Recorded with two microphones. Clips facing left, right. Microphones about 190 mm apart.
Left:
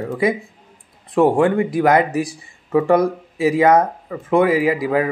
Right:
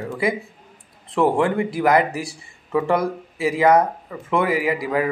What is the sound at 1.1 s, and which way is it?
Speech, 15° left (ahead or behind).